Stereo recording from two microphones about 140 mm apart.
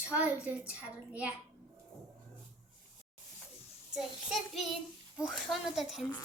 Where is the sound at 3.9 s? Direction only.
5° right (ahead or behind).